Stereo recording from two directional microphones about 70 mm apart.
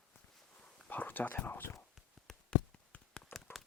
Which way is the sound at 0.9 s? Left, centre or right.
Left.